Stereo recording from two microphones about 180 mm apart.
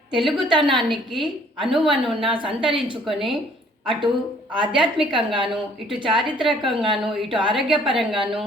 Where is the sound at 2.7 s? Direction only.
25° right (ahead or behind).